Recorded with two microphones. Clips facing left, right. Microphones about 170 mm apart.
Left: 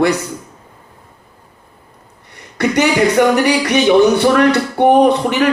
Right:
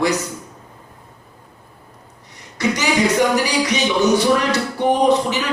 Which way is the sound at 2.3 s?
60° left (ahead or behind).